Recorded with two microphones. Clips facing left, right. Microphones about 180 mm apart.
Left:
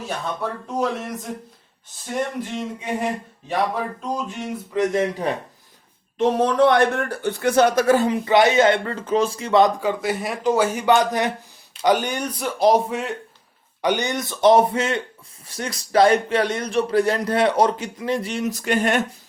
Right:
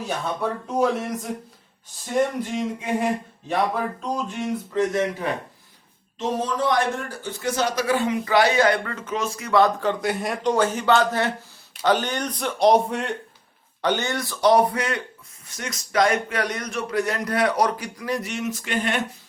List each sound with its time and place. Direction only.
0.0 s speech: centre (ahead or behind)
6.1 s a man's voice: 60° left (ahead or behind); by 9.7 s 20° left (ahead or behind)
9.8 s a man's voice: 5° left (ahead or behind)
13.8 s a man's voice: 15° left (ahead or behind); by 19.0 s 45° left (ahead or behind)